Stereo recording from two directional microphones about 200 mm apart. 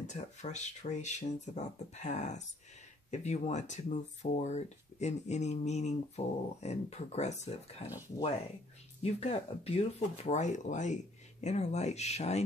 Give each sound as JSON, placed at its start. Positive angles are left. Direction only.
{"t": 0.0, "sound": "speech", "side_deg": 35}
{"t": 9.0, "sound": "speech", "side_deg": 30}